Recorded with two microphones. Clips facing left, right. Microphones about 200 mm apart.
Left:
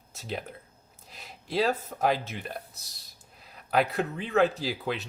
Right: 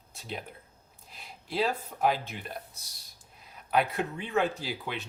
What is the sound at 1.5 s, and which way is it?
Speech, 40° left (ahead or behind).